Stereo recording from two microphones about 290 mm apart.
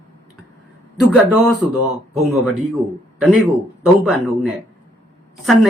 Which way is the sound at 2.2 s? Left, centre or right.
Centre.